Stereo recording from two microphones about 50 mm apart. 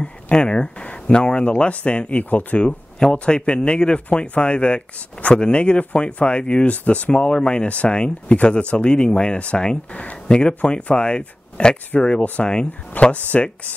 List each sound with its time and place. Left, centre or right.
0.0 s speech: left
2.6 s speech: left
13.0 s speech: left